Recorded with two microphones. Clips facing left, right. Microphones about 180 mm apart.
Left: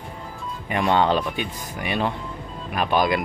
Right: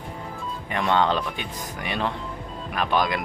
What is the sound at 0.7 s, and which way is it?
Speech, 15° left (ahead or behind).